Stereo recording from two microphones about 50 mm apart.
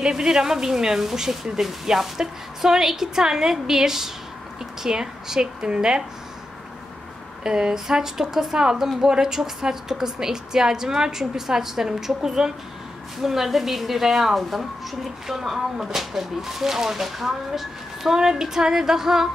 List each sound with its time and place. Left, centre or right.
0.0 s a woman's voice: centre
7.4 s a woman's voice: centre